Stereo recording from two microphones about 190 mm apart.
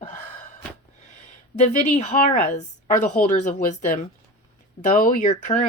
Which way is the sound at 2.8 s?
40° left (ahead or behind).